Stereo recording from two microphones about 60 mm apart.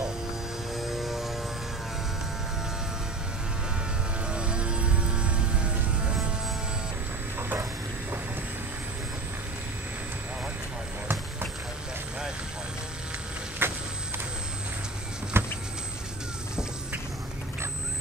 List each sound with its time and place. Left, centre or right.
0.7 s aircraft: centre
4.3 s vehicle: centre
13.6 s vehicle: right
15.3 s vehicle: right